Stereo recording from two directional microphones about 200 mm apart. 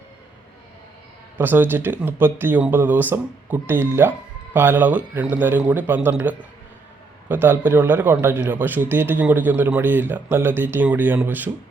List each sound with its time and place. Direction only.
1.4 s a man's voice: 10° right (ahead or behind)